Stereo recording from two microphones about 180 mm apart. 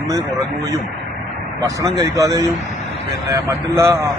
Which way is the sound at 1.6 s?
20° right (ahead or behind).